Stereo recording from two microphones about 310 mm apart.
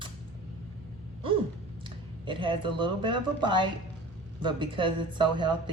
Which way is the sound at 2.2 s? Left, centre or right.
Centre.